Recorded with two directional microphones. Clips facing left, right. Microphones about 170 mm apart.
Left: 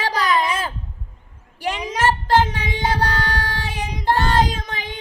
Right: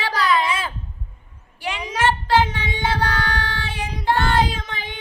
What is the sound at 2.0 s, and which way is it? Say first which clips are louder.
Child singing: left 1 dB; 40° left (ahead or behind).